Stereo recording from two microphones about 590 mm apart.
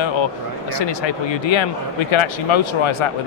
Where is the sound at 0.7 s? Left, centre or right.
Left.